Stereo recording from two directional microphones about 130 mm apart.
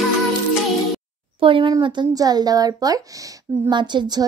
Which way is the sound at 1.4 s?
45° right (ahead or behind).